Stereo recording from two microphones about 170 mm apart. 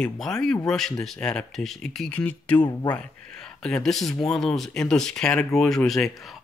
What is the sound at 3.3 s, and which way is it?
Speech, 5° left (ahead or behind).